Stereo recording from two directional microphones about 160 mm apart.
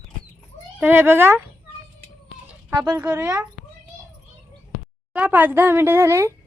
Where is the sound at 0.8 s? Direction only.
15° right (ahead or behind).